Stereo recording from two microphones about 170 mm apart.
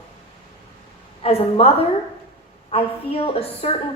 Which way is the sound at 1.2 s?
35° left (ahead or behind).